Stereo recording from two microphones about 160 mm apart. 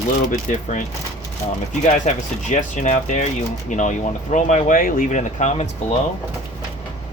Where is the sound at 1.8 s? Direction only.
50° left (ahead or behind).